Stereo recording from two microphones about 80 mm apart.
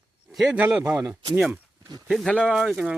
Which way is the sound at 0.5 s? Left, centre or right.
Centre.